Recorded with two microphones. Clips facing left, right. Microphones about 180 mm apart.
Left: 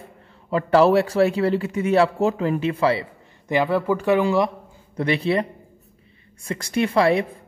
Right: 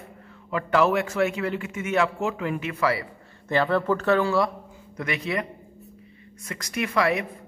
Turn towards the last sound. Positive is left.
turn(degrees=30)  # may be behind; listen again after turning